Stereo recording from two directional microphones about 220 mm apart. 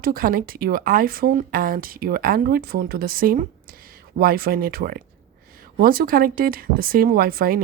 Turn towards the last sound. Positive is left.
turn(degrees=-40)  # may be behind; listen again after turning